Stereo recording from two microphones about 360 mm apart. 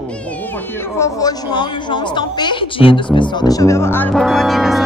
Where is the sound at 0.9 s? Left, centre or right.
Centre.